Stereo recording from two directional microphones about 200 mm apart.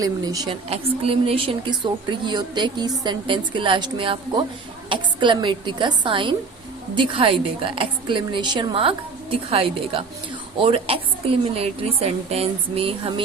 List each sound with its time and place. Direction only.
0.0 s speech: 15° right (ahead or behind)
0.7 s a woman's voice: 30° right (ahead or behind)